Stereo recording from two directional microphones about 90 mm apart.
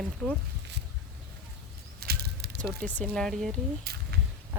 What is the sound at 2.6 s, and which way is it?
Speech, 15° left (ahead or behind).